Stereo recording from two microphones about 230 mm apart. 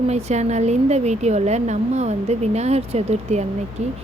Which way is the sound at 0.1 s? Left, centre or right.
Right.